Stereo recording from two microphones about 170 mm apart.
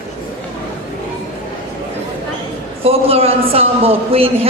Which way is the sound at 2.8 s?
35° right (ahead or behind).